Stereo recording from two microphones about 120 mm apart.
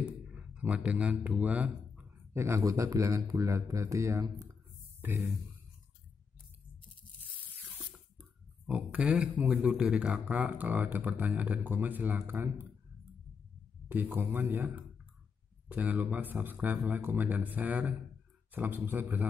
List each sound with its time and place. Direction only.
0.3 s speech: 10° right (ahead or behind)
2.3 s speech: 25° right (ahead or behind)
7.9 s speech: 10° right (ahead or behind)
13.8 s speech: 15° right (ahead or behind)